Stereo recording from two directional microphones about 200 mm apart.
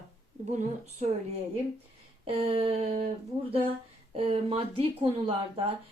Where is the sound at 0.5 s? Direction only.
35° right (ahead or behind).